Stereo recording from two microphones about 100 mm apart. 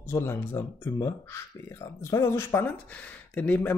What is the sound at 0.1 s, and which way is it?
Speech, 25° left (ahead or behind).